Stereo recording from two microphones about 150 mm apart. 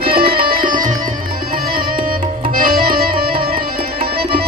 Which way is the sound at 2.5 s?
75° right (ahead or behind).